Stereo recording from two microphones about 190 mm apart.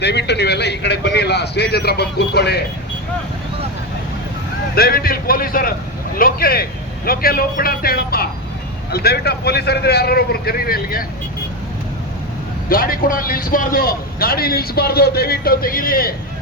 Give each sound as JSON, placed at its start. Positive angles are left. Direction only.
{"t": 0.0, "sound": "a man's voice", "side_deg": 65}
{"t": 4.7, "sound": "a man's voice", "side_deg": 50}
{"t": 12.6, "sound": "a man's voice", "side_deg": 50}